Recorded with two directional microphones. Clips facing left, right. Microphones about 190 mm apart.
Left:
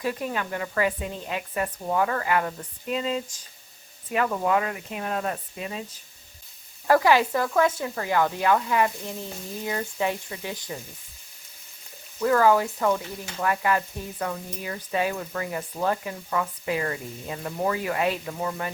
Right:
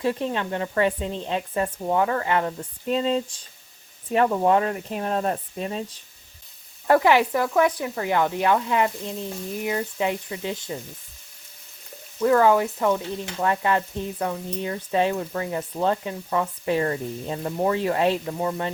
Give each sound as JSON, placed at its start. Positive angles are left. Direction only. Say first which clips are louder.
{"t": 0.0, "sound": "frying", "louder": "right 4 dB", "side_deg": -25}
{"t": 4.1, "sound": "speech", "louder": "right 4 dB", "side_deg": -30}
{"t": 6.8, "sound": "frying", "louder": "right 2 dB", "side_deg": -20}
{"t": 12.2, "sound": "frying", "louder": "right 2 dB", "side_deg": -20}